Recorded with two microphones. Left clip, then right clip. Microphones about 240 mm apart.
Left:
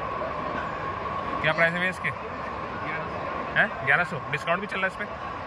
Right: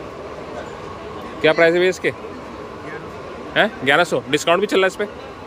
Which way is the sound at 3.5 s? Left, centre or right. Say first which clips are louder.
Right 7 dB; right.